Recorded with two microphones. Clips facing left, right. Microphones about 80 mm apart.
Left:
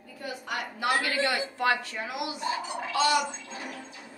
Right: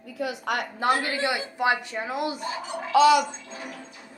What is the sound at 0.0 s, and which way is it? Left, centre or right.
Speech, right.